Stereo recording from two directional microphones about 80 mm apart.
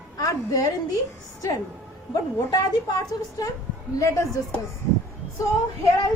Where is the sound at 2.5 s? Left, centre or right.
Left.